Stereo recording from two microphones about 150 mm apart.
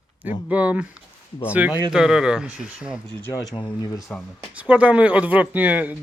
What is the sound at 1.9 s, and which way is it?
Speech, 5° right (ahead or behind).